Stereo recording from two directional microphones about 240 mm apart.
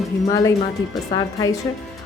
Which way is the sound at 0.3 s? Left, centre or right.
Centre.